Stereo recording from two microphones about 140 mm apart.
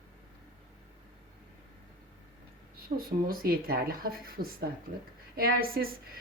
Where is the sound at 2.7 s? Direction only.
90° right.